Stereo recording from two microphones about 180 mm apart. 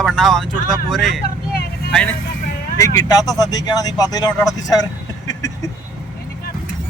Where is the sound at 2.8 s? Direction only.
20° left (ahead or behind).